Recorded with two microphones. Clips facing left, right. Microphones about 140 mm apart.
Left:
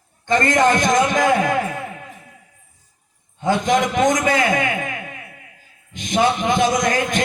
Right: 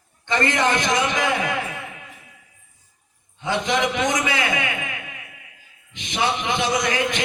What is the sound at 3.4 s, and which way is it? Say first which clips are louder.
A man's voice: left 4 dB; 45° left (ahead or behind).